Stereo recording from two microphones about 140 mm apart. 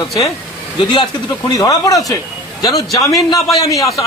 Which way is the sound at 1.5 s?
25° left (ahead or behind).